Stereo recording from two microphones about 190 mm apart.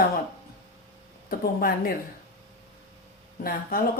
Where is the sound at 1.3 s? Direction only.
50° left (ahead or behind).